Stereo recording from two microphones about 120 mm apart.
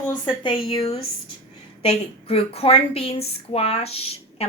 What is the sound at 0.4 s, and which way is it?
A woman's voice, 45° left (ahead or behind).